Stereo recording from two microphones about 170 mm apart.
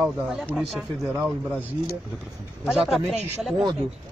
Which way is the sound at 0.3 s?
Centre (ahead or behind).